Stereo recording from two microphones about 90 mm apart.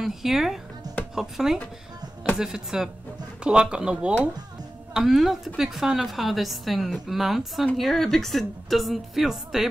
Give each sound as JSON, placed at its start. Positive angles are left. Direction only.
{"t": 0.0, "sound": "a woman's voice", "side_deg": -5}